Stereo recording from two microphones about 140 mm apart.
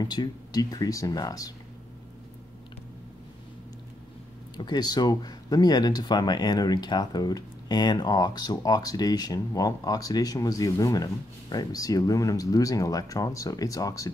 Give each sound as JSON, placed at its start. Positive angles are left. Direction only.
{"t": 0.0, "sound": "speech", "side_deg": 30}
{"t": 4.6, "sound": "speech", "side_deg": 30}